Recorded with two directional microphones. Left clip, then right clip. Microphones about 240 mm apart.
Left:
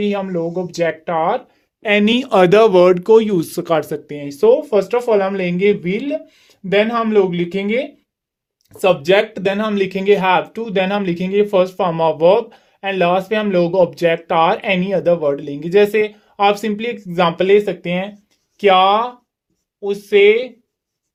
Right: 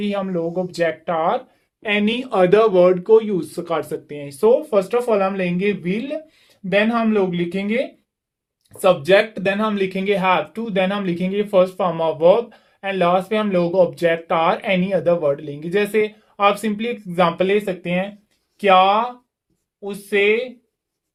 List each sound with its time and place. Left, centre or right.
0.0 s speech: left
1.8 s speech: left
8.8 s speech: left